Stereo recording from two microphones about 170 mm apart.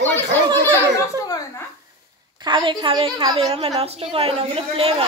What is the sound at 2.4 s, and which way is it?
A woman's voice, 25° right (ahead or behind).